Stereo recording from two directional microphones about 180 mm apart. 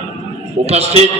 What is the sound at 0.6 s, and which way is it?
Speech, 35° right (ahead or behind).